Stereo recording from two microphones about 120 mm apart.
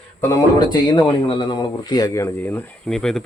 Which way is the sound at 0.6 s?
35° left (ahead or behind).